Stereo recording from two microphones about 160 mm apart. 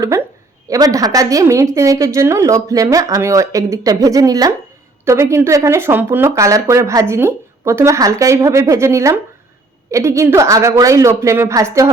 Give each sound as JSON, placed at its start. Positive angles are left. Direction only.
{"t": 0.0, "sound": "a woman's voice", "side_deg": -20}